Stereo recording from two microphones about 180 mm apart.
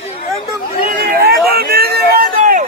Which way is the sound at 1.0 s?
60° right (ahead or behind).